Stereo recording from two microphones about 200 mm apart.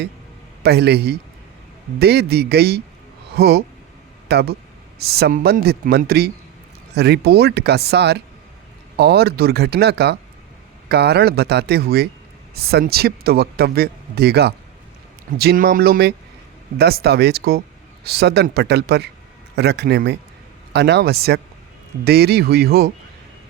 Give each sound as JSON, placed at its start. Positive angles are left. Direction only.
{"t": 0.6, "sound": "speech", "side_deg": -55}